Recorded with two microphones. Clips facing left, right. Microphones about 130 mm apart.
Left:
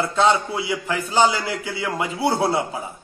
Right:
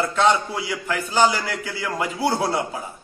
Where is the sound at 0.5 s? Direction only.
20° left (ahead or behind).